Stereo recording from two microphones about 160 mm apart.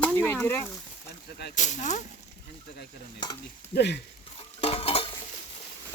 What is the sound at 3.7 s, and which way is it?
Speech, 90° left.